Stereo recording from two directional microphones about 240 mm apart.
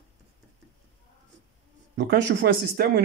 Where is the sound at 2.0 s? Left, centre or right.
Right.